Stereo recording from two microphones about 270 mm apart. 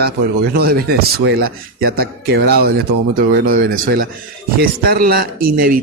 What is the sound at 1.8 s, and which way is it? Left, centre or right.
Speech, right.